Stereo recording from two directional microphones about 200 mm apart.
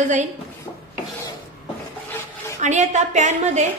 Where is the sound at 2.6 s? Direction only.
35° right (ahead or behind).